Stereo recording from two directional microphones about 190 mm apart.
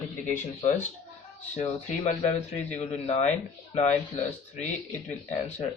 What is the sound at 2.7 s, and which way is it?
Speech, 35° left (ahead or behind).